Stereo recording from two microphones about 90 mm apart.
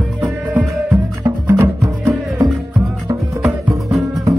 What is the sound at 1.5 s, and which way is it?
Music, 25° right (ahead or behind).